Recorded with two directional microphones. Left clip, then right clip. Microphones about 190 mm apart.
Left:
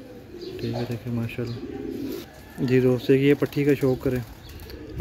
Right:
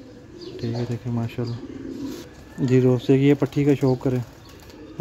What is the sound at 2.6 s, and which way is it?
Speech, 40° right (ahead or behind).